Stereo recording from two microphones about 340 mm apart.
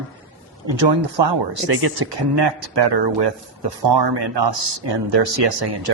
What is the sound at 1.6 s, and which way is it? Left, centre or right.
Speech, right.